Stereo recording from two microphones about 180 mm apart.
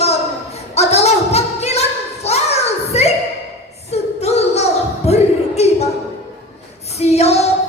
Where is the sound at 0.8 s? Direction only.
35° left (ahead or behind).